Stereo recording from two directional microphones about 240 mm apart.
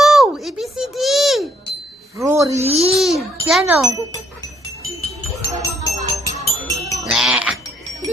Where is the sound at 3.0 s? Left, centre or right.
Centre.